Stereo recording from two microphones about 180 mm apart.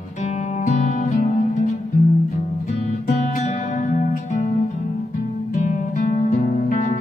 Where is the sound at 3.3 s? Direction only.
40° left (ahead or behind).